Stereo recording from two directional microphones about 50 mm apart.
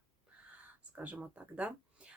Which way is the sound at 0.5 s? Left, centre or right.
Right.